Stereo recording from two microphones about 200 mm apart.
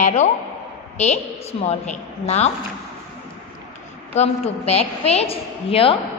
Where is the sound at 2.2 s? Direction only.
35° left (ahead or behind).